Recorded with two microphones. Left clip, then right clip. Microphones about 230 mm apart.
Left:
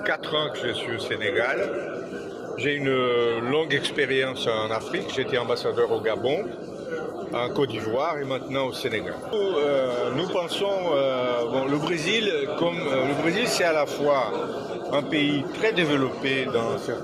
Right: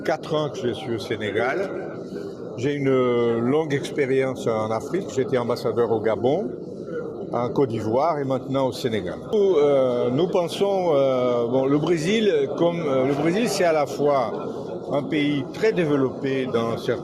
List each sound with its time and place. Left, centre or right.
0.0 s a man's voice: right
2.6 s a man's voice: right